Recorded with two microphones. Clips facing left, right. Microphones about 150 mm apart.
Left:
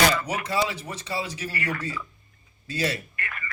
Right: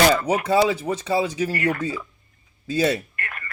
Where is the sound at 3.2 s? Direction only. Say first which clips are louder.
Right 1 dB; 50° right (ahead or behind).